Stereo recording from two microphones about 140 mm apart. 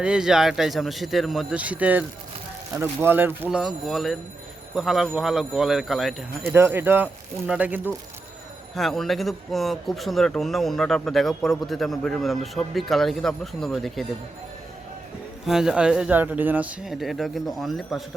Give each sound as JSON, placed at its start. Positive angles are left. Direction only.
{"t": 0.0, "sound": "a man's voice", "side_deg": -5}
{"t": 3.6, "sound": "a man's voice", "side_deg": 0}
{"t": 6.5, "sound": "speech", "side_deg": -15}
{"t": 8.7, "sound": "a man's voice", "side_deg": 0}
{"t": 15.4, "sound": "a man's voice", "side_deg": -5}